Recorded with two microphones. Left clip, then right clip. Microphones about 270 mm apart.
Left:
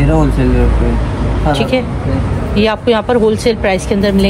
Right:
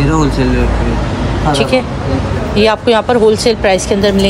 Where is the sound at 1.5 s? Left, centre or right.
Centre.